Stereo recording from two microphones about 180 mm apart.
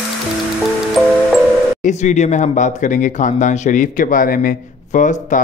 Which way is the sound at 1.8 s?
40° left (ahead or behind).